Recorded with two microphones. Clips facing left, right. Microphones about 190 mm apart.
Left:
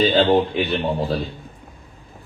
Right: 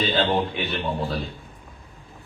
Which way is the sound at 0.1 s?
35° left (ahead or behind).